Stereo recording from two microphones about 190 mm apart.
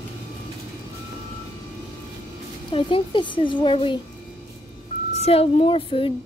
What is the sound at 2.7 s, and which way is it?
Speech, 25° left (ahead or behind).